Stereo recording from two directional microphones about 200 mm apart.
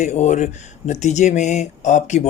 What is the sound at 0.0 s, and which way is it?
Speech, 35° left (ahead or behind).